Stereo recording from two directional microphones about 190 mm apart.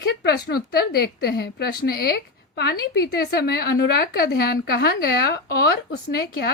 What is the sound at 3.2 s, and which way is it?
A woman's voice, 55° left (ahead or behind).